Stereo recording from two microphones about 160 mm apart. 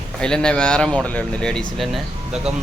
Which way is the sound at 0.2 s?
5° left (ahead or behind).